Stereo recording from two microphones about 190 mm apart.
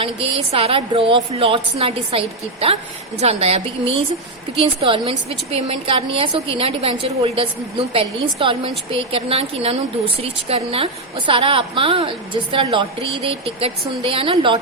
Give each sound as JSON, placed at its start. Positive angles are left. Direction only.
{"t": 0.0, "sound": "a woman's voice", "side_deg": -30}